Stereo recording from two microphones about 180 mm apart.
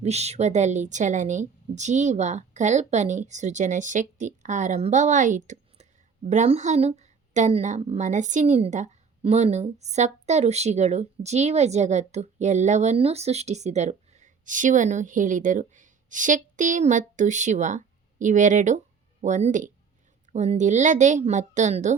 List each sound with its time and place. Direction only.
0.0 s a woman's voice: 35° right (ahead or behind)